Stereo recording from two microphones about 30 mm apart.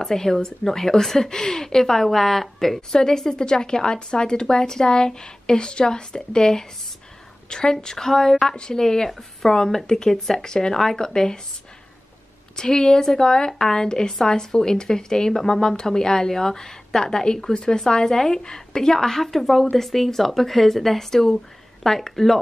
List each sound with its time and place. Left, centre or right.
0.0 s a woman's voice: centre
7.7 s a woman's voice: centre
12.5 s a woman's voice: left; by 22.4 s centre